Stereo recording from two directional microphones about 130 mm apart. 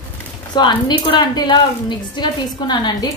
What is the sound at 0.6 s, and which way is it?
A woman's voice, 35° left (ahead or behind).